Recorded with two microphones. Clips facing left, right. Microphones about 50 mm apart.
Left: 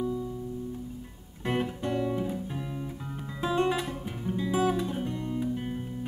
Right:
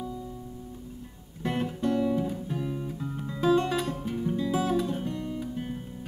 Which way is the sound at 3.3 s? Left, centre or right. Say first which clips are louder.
Right 3 dB; centre.